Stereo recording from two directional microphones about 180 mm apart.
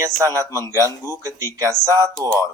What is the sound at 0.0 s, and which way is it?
Speech, 15° right (ahead or behind).